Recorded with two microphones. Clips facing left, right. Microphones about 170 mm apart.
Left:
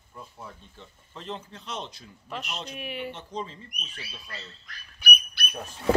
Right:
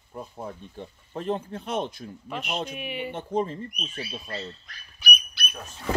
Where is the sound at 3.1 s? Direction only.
50° right (ahead or behind).